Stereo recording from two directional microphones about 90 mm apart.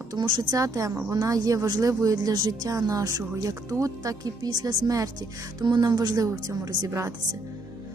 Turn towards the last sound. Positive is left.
turn(degrees=-35)  # may be behind; listen again after turning